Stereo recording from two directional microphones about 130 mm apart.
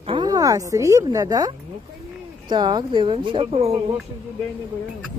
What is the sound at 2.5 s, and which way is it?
Speech, 35° right (ahead or behind).